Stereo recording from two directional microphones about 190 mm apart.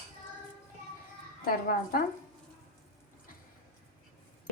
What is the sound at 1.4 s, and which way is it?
Speech, 50° left (ahead or behind).